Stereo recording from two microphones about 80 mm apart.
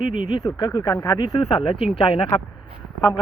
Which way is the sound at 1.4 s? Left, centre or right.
Left.